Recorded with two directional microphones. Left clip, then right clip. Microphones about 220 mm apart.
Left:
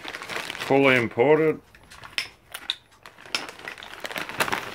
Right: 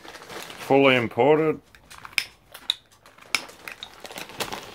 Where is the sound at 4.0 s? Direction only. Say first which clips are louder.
Left 7 dB; 40° left (ahead or behind).